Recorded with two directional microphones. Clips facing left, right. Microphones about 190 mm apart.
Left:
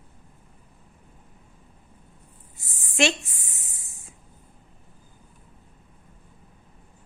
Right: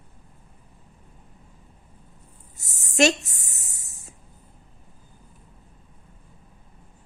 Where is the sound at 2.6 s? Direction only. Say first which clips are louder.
Right 4 dB; 40° right (ahead or behind).